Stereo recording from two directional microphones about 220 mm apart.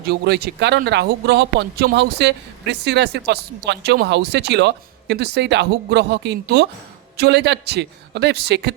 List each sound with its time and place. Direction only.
0.0 s a man's voice: 45° right (ahead or behind)